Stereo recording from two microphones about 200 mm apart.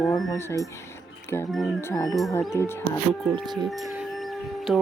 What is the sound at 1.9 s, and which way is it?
Music, 15° left (ahead or behind).